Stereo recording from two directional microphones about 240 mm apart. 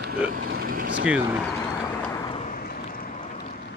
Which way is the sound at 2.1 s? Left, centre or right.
Left.